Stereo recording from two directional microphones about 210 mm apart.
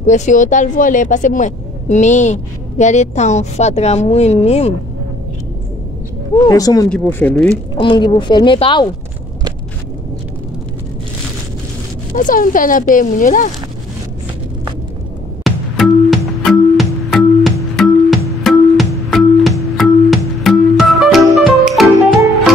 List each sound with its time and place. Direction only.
0.0 s speech: 35° left (ahead or behind)
6.4 s speech: 15° left (ahead or behind)
7.8 s speech: 20° left (ahead or behind)
12.1 s speech: 40° left (ahead or behind)
15.4 s music: centre (ahead or behind)